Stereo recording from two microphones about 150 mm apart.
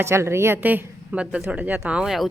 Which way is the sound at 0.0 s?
15° right (ahead or behind).